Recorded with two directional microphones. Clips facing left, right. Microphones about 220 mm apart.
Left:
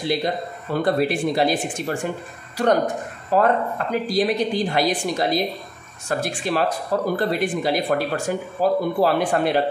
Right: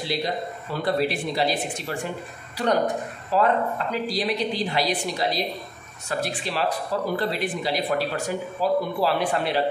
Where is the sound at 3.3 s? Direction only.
50° left (ahead or behind).